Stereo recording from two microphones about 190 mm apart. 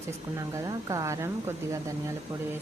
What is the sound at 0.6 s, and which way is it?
A woman's voice, 20° right (ahead or behind).